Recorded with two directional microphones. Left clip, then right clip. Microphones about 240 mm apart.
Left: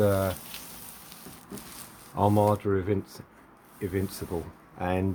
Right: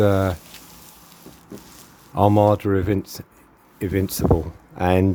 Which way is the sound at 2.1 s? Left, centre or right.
Right.